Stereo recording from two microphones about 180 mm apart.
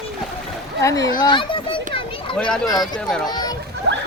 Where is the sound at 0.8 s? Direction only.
20° left (ahead or behind).